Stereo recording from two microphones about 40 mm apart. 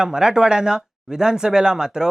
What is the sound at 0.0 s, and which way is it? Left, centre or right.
Speech, centre.